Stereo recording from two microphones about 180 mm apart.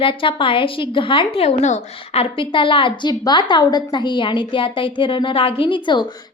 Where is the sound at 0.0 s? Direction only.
30° left (ahead or behind).